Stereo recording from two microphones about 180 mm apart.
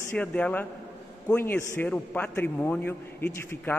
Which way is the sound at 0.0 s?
10° left (ahead or behind).